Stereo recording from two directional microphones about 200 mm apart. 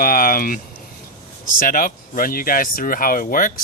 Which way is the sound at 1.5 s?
45° left (ahead or behind).